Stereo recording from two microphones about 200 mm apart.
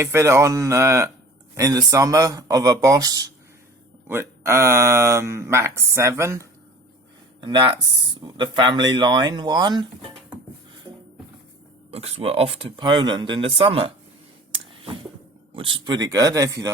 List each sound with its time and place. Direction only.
0.0 s speech: 15° right (ahead or behind)
11.9 s speech: 30° right (ahead or behind)
15.5 s speech: 25° right (ahead or behind)